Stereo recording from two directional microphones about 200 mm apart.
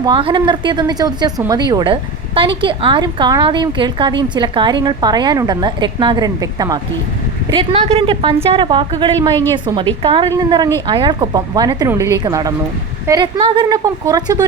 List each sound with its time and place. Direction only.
0.0 s speech: 25° right (ahead or behind)